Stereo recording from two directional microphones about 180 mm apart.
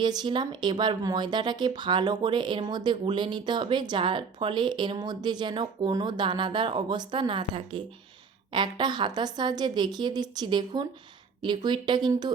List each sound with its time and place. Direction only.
0.0 s speech: 25° right (ahead or behind)